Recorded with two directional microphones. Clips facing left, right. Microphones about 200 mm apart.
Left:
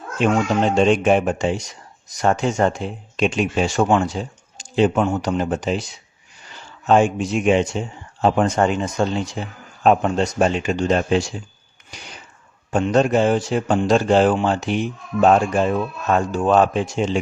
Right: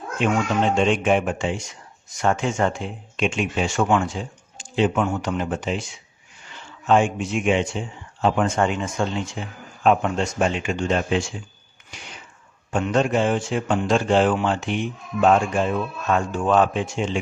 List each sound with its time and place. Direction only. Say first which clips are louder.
0.2 s speech: left 3 dB; 40° left (ahead or behind)
11.9 s a sound: left 2 dB; 40° left (ahead or behind)
12.7 s speech: left 4 dB; 40° left (ahead or behind)